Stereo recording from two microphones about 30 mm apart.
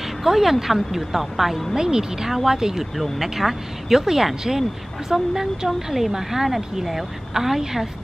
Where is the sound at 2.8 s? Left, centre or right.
Centre.